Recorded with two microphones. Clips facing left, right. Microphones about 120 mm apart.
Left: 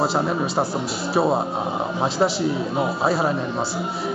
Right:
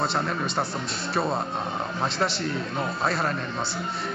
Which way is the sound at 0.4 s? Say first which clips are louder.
Left 6 dB; 30° left (ahead or behind).